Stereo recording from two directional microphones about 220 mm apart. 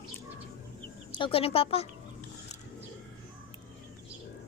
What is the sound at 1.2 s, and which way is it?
Speech, 25° left (ahead or behind).